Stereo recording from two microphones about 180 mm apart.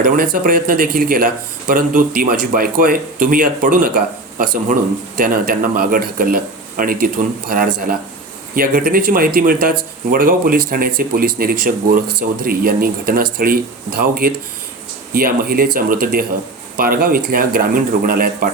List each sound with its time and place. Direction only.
0.0 s speech: 50° right (ahead or behind)